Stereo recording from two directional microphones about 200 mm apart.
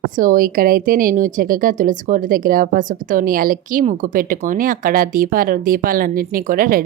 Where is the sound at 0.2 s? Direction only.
45° right (ahead or behind).